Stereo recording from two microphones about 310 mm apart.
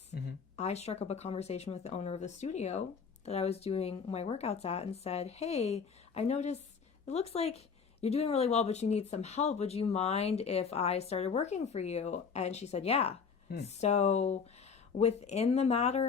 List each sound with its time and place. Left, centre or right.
0.5 s speech: left